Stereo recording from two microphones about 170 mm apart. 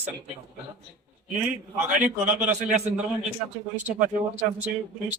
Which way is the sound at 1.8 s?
50° right (ahead or behind).